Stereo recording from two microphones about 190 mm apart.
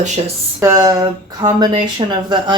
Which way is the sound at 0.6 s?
15° right (ahead or behind).